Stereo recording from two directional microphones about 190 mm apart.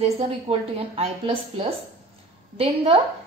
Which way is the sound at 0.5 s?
30° right (ahead or behind).